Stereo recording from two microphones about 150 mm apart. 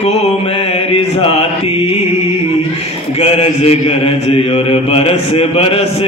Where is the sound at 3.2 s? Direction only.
40° left (ahead or behind).